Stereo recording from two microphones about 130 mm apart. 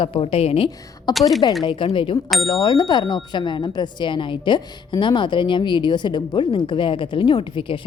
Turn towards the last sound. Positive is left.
turn(degrees=40)  # may be behind; listen again after turning